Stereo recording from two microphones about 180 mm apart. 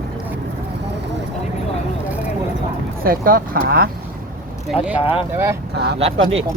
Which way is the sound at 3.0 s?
55° right (ahead or behind).